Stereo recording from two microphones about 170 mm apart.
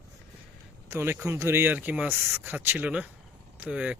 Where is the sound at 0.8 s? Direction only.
15° right (ahead or behind).